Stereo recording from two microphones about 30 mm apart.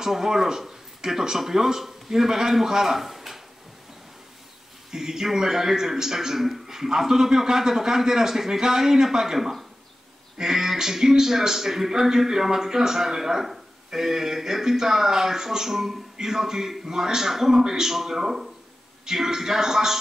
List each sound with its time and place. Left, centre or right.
0.0 s a man's voice: centre
3.0 s a sound: centre
4.9 s a man's voice: centre